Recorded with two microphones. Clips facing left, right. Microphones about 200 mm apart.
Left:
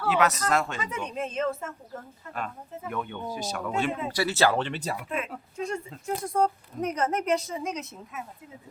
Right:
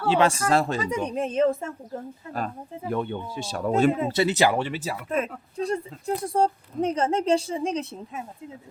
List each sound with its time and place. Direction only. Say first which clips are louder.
0.0 s speech: right 3 dB; 30° right (ahead or behind)
4.1 s speech: right 3 dB; 20° right (ahead or behind); by 5.0 s 5° right (ahead or behind)
5.0 s speech: right 6 dB; 40° right (ahead or behind)